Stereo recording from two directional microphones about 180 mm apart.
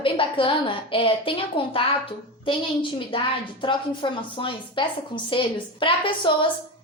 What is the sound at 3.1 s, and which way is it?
A woman's voice, 25° left (ahead or behind).